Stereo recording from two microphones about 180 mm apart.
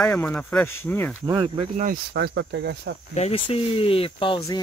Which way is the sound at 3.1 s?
35° left (ahead or behind).